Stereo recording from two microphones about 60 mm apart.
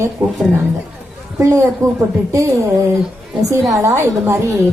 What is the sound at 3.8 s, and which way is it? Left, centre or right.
Speech, right.